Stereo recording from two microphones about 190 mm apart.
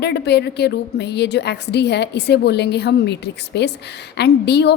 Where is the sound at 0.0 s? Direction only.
60° left (ahead or behind).